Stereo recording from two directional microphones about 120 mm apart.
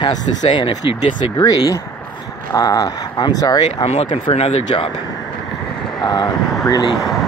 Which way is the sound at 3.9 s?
60° left (ahead or behind).